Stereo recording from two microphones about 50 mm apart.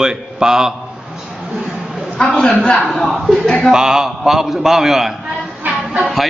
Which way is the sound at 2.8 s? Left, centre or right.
Centre.